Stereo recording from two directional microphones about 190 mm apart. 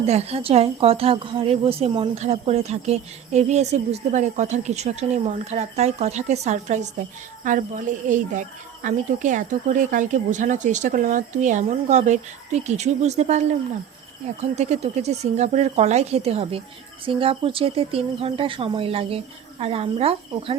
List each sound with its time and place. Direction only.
0.0 s a woman's voice: 35° right (ahead or behind)
14.5 s a woman's voice: 35° right (ahead or behind)